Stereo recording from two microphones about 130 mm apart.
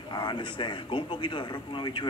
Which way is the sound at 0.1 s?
35° left (ahead or behind).